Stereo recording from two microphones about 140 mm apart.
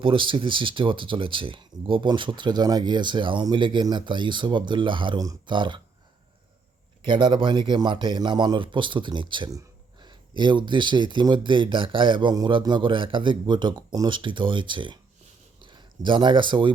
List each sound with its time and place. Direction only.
0.0 s speech: 40° right (ahead or behind)
7.0 s speech: 35° right (ahead or behind)